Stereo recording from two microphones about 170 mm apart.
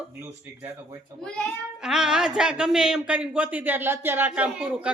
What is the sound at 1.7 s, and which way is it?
Speech, 5° right (ahead or behind).